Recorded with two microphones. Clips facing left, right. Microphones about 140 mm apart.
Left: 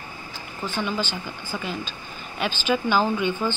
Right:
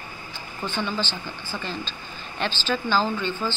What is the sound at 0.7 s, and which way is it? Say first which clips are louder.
Speech: left 1 dB; 5° left (ahead or behind).